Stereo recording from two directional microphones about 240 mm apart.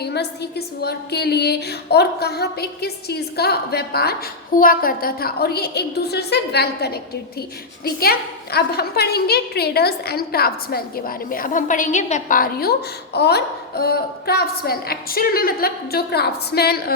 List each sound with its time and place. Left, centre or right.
0.0 s a woman's voice: left